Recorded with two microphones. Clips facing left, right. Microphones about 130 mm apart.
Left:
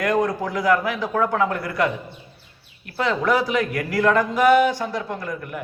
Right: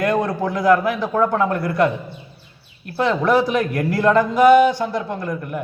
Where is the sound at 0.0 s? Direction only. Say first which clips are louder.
Right 2 dB; 25° right (ahead or behind).